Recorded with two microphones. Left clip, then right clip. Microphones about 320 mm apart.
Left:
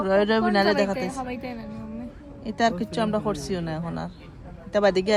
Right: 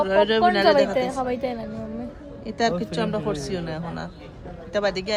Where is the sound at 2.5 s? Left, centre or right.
Left.